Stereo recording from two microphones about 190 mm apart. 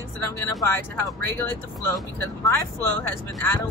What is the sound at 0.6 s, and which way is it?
Speech, 10° left (ahead or behind).